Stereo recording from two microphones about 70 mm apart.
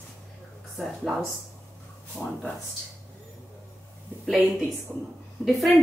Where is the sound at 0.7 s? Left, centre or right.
Centre.